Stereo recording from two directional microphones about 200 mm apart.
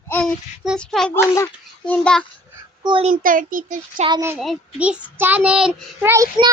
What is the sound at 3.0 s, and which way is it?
A child's voice, 45° right (ahead or behind).